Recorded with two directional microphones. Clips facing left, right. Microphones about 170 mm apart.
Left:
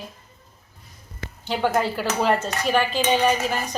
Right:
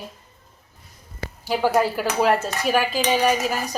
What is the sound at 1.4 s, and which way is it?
A woman's voice, 5° right (ahead or behind).